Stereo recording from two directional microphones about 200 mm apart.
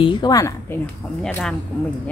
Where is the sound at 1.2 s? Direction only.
5° left (ahead or behind).